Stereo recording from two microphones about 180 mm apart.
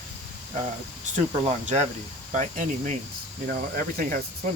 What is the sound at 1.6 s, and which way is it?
Speech, 40° right (ahead or behind).